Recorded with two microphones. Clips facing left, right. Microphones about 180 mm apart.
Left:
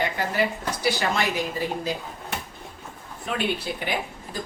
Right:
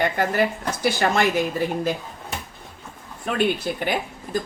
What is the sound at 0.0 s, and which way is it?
A woman's voice, 50° right (ahead or behind).